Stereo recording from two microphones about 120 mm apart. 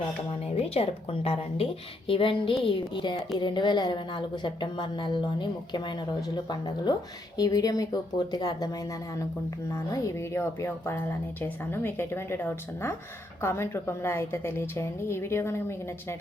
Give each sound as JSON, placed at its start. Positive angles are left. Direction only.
{"t": 0.5, "sound": "a woman's voice", "side_deg": 55}